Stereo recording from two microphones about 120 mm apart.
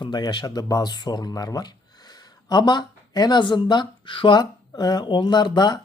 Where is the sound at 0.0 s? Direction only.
40° left (ahead or behind).